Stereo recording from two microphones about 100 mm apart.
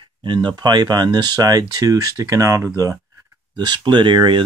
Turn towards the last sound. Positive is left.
turn(degrees=-55)  # may be behind; listen again after turning